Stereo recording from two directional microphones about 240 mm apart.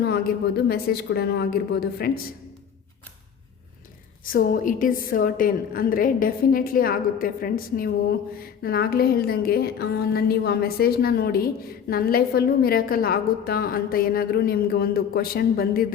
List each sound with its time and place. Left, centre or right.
0.0 s a woman's voice: left
4.3 s a woman's voice: left